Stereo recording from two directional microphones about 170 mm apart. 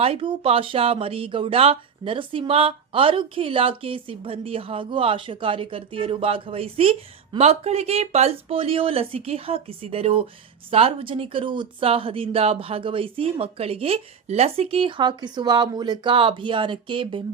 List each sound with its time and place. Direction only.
0.0 s speech: 35° right (ahead or behind)